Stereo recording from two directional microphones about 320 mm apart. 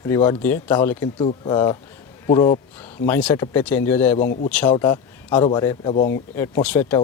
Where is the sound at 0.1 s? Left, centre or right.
Centre.